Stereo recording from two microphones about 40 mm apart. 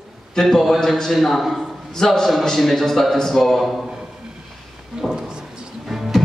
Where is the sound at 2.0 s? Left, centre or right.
Centre.